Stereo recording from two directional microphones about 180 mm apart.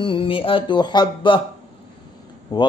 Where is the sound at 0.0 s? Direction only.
30° left (ahead or behind).